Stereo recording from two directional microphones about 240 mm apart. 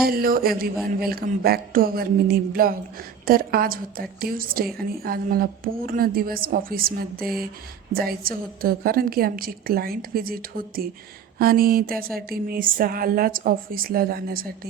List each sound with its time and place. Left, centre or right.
0.0 s speech: right